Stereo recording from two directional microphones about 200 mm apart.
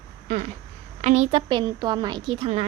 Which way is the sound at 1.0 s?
35° right (ahead or behind).